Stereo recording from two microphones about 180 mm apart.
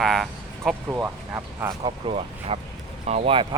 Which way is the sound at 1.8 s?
35° right (ahead or behind).